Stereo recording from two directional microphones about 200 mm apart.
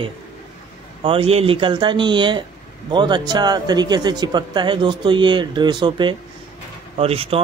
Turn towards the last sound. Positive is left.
turn(degrees=-30)  # may be behind; listen again after turning